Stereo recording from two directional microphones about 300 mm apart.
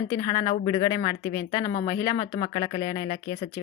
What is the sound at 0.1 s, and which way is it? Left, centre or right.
A woman's voice, centre.